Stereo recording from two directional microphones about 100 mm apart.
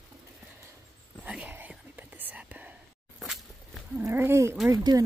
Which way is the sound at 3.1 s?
Centre (ahead or behind).